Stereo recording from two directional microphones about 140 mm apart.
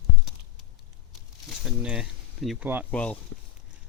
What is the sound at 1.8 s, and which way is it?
Speech, 5° right (ahead or behind).